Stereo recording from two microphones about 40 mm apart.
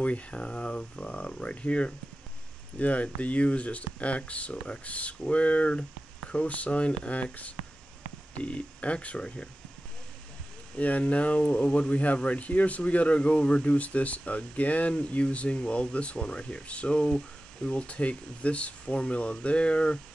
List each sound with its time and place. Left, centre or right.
0.0 s speech: left
8.5 s speech: left
10.8 s speech: left